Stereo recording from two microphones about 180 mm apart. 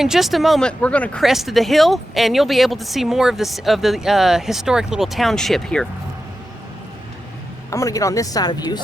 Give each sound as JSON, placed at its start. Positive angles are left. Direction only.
{"t": 0.0, "sound": "speech", "side_deg": 0}
{"t": 7.7, "sound": "speech", "side_deg": 20}